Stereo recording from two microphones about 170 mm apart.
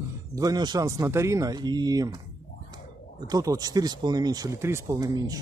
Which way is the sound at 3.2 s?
20° right (ahead or behind).